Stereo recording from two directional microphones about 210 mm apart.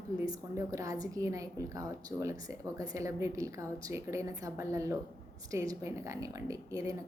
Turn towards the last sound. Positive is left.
turn(degrees=-15)  # may be behind; listen again after turning